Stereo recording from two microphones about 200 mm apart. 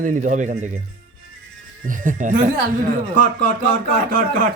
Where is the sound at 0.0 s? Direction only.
40° right (ahead or behind).